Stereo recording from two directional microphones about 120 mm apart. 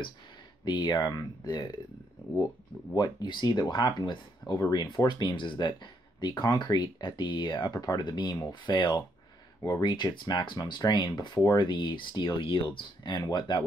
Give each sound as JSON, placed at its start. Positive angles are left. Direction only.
{"t": 0.7, "sound": "speech", "side_deg": 35}